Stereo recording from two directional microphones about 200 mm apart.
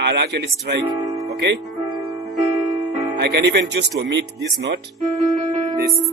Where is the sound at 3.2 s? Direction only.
55° right (ahead or behind).